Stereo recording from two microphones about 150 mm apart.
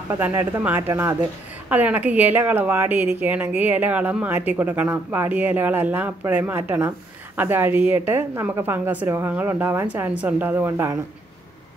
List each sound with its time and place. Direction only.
0.1 s speech: 15° right (ahead or behind)